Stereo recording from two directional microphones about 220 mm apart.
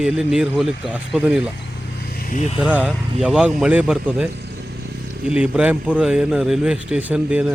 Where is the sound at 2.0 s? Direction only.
45° left (ahead or behind).